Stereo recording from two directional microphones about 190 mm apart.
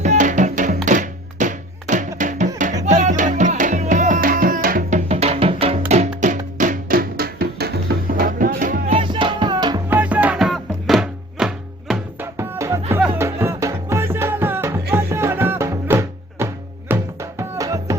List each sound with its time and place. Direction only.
0.0 s music: 40° right (ahead or behind)
9.0 s music: 25° right (ahead or behind)
9.9 s music: 10° right (ahead or behind)
12.4 s music: 15° right (ahead or behind)